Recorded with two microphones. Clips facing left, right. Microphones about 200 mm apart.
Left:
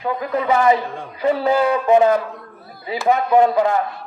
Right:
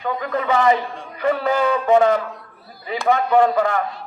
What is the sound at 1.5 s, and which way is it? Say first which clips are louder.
Speech: left 1 dB; 15° left (ahead or behind).